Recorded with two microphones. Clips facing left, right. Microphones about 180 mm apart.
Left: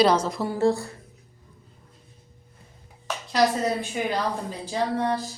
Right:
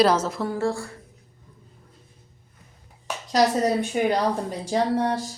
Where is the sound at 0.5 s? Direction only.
20° left (ahead or behind).